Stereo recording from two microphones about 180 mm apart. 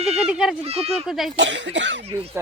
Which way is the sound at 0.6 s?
35° right (ahead or behind).